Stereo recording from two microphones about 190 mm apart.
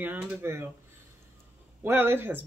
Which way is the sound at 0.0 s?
10° right (ahead or behind).